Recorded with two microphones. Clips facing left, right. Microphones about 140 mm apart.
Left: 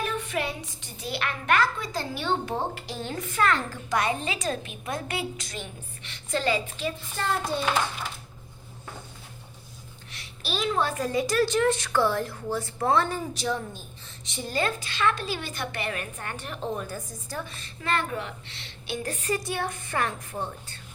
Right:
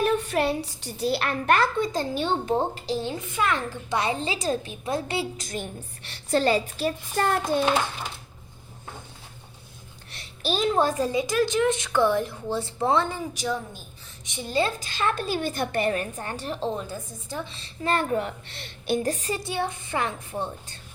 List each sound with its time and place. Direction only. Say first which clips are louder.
0.0 s a woman's voice: right 6 dB; 40° right (ahead or behind)
1.8 s a woman's voice: right 6 dB; 20° right (ahead or behind)
5.5 s a woman's voice: right 5 dB; 45° right (ahead or behind)
10.1 s a woman's voice: right 6 dB; 40° right (ahead or behind); by 14.7 s 20° right (ahead or behind)
14.8 s a woman's voice: even; 40° right (ahead or behind); by 17.6 s 25° right (ahead or behind)
17.8 s a child's voice: right 4 dB; 40° right (ahead or behind)
19.3 s a woman's voice: right 1 dB; 25° right (ahead or behind)